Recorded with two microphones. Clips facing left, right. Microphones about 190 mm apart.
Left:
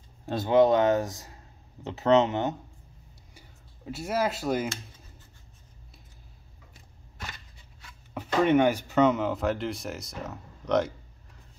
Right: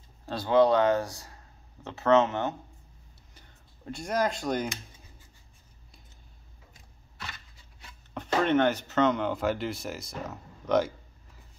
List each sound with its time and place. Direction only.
0.3 s speech: 20° left (ahead or behind)
3.3 s a sound: 5° left (ahead or behind)
8.1 s speech: 10° left (ahead or behind)